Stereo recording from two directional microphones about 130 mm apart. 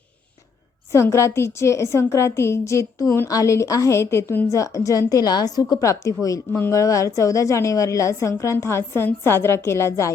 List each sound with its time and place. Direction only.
0.9 s a woman's voice: 20° left (ahead or behind)